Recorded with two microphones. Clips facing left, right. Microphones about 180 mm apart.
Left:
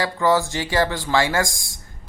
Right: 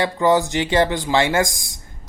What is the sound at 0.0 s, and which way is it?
Speech, 20° right (ahead or behind).